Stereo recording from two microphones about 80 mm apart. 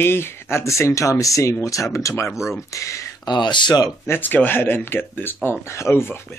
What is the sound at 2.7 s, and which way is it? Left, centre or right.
Speech, left.